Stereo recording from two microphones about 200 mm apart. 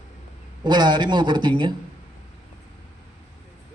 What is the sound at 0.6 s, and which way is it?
A man's voice, 20° right (ahead or behind).